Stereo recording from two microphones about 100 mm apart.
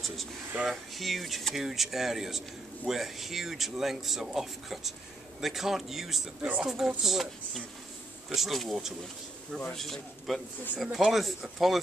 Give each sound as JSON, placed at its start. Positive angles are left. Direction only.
{"t": 0.7, "sound": "speech", "side_deg": 0}